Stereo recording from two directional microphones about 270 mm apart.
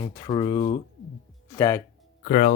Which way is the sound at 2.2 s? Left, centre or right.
Left.